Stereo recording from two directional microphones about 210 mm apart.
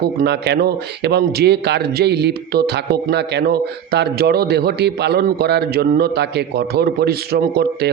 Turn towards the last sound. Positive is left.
turn(degrees=-50)  # may be behind; listen again after turning